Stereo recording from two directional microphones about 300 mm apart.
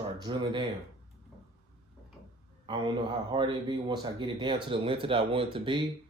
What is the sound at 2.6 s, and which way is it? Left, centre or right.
A man's voice, centre.